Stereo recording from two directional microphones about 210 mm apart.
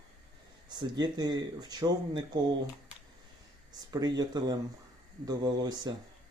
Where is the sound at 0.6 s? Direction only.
20° right (ahead or behind).